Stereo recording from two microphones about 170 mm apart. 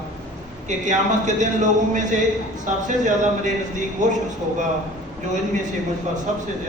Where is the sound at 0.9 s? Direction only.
45° right (ahead or behind).